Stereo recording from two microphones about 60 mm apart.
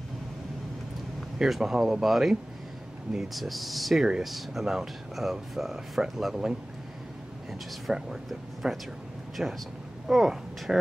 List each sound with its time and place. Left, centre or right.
1.4 s speech: centre
7.9 s speech: centre